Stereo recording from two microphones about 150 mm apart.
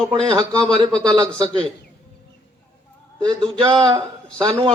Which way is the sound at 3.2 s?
30° right (ahead or behind).